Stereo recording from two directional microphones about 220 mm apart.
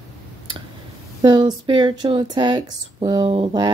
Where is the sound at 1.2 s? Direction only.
20° right (ahead or behind).